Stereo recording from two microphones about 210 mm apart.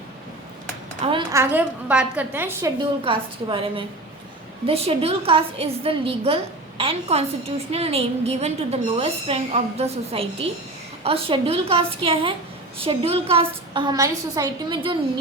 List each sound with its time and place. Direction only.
1.3 s a woman's voice: 10° right (ahead or behind)
3.0 s a woman's voice: 25° right (ahead or behind)